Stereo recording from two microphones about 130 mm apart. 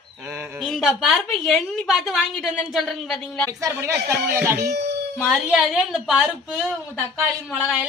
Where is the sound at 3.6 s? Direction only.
20° right (ahead or behind).